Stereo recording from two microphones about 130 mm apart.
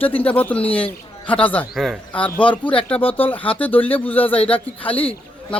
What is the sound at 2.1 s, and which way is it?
Speech, 10° left (ahead or behind).